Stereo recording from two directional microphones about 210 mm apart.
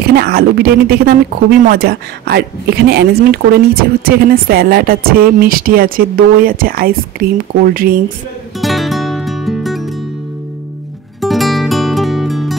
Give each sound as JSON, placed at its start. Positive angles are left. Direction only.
{"t": 0.0, "sound": "speech", "side_deg": -45}
{"t": 8.5, "sound": "music", "side_deg": 0}
{"t": 11.1, "sound": "music", "side_deg": 0}